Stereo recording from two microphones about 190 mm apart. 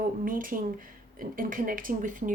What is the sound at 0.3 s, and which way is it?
Speech, 45° right (ahead or behind).